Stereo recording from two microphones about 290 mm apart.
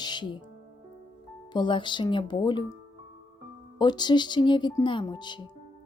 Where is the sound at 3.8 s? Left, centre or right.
Centre.